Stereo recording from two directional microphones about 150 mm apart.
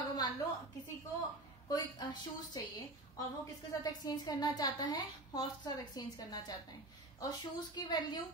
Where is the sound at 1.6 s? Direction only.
25° left (ahead or behind).